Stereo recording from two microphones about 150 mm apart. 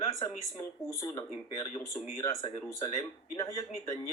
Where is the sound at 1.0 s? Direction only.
25° left (ahead or behind).